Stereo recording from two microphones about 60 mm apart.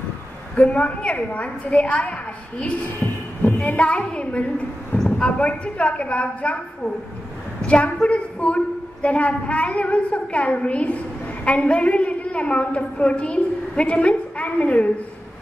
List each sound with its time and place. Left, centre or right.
0.6 s a woman's voice: left
3.5 s a woman's voice: left